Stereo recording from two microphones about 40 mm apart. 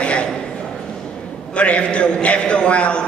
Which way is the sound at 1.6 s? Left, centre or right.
Left.